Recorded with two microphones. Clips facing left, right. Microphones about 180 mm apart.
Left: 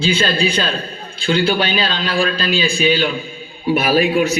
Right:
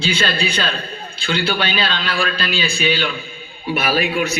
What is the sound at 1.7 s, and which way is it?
A man's voice, 35° left (ahead or behind).